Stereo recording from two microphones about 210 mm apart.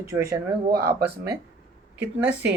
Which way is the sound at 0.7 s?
45° right (ahead or behind).